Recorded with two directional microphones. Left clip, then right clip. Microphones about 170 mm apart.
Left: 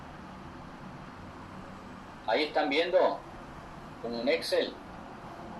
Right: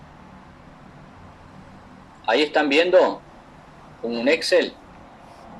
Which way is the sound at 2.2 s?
50° right (ahead or behind).